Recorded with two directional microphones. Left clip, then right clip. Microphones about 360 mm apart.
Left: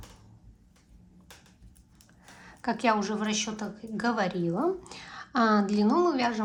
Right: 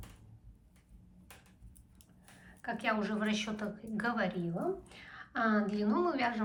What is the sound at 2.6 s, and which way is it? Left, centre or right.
A woman's voice, centre.